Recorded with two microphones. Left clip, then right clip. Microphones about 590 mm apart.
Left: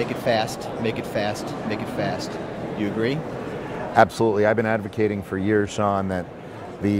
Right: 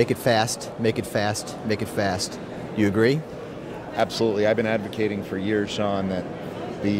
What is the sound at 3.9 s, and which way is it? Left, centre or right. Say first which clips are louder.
Speech: left 5 dB; left.